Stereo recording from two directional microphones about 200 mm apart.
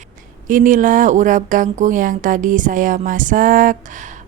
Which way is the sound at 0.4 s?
40° right (ahead or behind).